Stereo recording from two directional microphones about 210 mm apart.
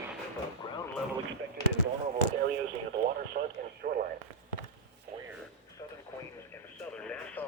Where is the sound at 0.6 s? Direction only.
25° left (ahead or behind).